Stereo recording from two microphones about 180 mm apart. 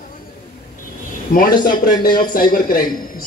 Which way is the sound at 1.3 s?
55° left (ahead or behind).